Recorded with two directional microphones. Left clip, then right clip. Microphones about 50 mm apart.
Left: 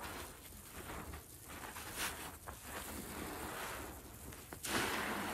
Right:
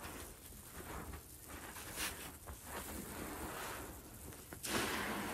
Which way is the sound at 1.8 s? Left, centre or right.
Left.